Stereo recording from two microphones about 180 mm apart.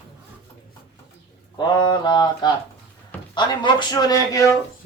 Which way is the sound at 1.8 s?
25° left (ahead or behind).